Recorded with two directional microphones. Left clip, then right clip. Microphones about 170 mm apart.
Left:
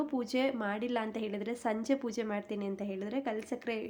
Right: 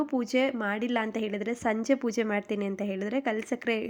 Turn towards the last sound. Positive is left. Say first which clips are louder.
# right 7 dB
turn(degrees=-30)  # may be behind; listen again after turning